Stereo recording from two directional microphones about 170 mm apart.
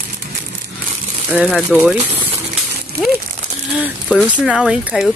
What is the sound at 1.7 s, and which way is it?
Speech, 10° right (ahead or behind).